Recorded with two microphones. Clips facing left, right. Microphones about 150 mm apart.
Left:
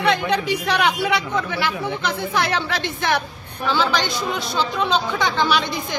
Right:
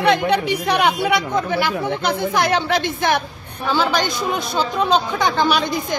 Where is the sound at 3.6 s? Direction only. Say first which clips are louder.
Right 2 dB; 45° right (ahead or behind).